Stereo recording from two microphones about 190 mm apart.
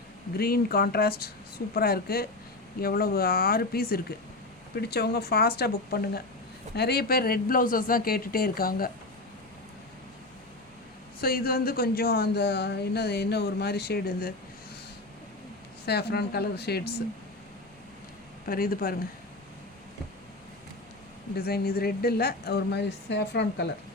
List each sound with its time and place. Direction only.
0.3 s speech: 55° left (ahead or behind)
11.2 s speech: 50° left (ahead or behind)
15.9 s speech: 60° left (ahead or behind)
18.4 s speech: 50° left (ahead or behind)
21.3 s speech: 55° left (ahead or behind)